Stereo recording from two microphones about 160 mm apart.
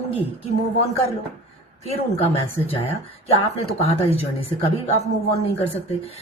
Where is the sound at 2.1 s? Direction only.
40° left (ahead or behind).